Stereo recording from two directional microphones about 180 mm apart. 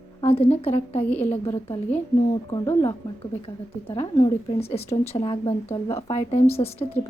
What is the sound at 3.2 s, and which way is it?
A woman's voice, 30° left (ahead or behind).